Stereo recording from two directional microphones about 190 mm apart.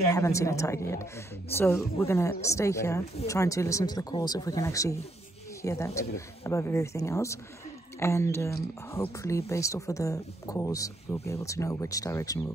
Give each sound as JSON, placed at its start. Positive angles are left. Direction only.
{"t": 0.1, "sound": "speech", "side_deg": 15}